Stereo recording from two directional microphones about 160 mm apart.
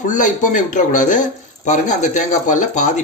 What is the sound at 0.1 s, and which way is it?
Speech, 55° left (ahead or behind).